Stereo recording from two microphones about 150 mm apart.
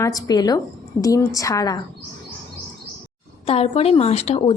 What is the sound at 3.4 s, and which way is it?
A woman's voice, 40° left (ahead or behind).